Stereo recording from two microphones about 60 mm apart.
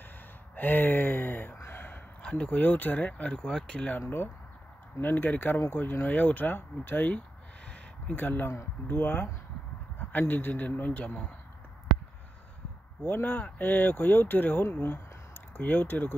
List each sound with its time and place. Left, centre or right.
0.6 s speech: left
1.6 s a sound: left
2.2 s speech: left
5.0 s speech: left
7.6 s a sound: centre
8.2 s speech: left
13.0 s speech: left